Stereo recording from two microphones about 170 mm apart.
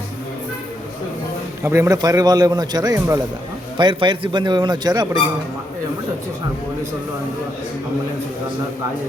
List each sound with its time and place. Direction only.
1.6 s a man's voice: 15° right (ahead or behind)